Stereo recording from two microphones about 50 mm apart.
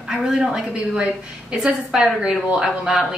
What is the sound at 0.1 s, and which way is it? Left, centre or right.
A woman's voice, centre.